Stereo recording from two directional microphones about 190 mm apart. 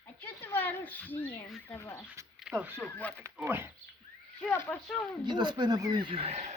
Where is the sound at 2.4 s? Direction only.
10° right (ahead or behind).